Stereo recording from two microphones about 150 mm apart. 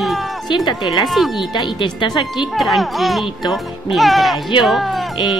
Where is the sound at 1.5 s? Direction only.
30° left (ahead or behind).